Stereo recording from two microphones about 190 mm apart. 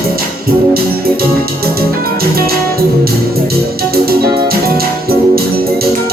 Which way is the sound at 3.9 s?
55° right (ahead or behind).